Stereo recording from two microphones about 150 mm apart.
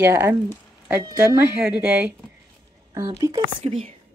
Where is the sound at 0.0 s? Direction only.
15° right (ahead or behind).